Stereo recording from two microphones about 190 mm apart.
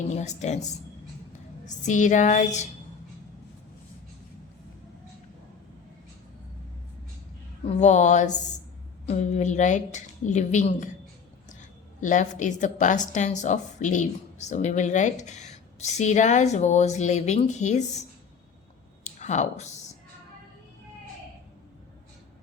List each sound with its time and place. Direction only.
0.2 s speech: 35° left (ahead or behind)
1.8 s speech: 40° left (ahead or behind)
7.8 s speech: 40° left (ahead or behind)
11.9 s speech: 40° left (ahead or behind)
19.0 s a sound: 40° left (ahead or behind)